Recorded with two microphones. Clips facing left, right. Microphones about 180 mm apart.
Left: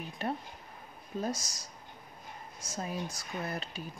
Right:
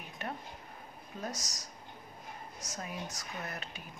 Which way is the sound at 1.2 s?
30° left (ahead or behind).